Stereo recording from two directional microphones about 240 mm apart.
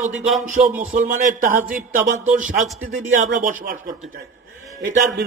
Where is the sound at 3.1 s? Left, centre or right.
Right.